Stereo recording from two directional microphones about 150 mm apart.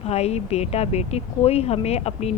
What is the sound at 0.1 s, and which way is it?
Speech, 45° left (ahead or behind).